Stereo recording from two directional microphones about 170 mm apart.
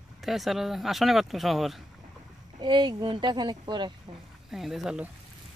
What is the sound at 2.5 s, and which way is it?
A woman's voice, 30° right (ahead or behind).